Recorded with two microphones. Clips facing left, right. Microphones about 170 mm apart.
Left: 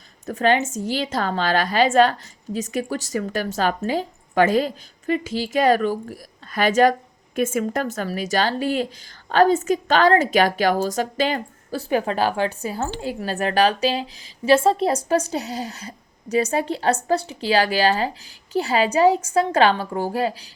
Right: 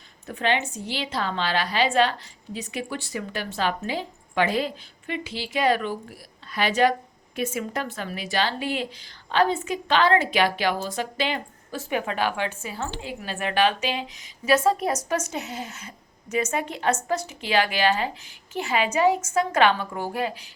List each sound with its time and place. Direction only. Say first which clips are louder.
0.3 s a woman's voice: left 6 dB; 40° left (ahead or behind)